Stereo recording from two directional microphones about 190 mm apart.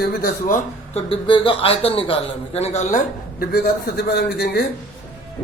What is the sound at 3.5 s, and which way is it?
A man's voice, 55° left (ahead or behind).